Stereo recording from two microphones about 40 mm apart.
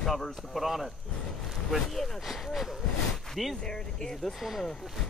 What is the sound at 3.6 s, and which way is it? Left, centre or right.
Speech, centre.